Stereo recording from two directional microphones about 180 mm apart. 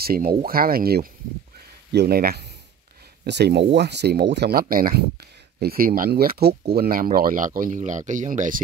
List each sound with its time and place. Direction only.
0.0 s speech: 55° right (ahead or behind)